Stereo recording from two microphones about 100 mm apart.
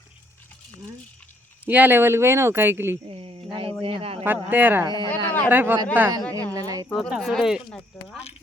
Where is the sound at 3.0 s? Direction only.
70° right (ahead or behind).